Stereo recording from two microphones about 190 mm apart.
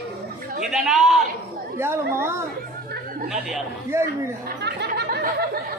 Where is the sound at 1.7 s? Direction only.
15° right (ahead or behind).